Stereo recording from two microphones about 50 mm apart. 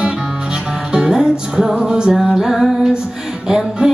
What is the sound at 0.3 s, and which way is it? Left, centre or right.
Music, centre.